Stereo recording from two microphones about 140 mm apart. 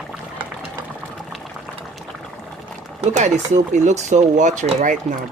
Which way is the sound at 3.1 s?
55° right (ahead or behind).